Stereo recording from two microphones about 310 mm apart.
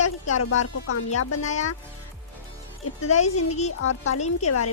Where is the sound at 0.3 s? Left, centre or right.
Left.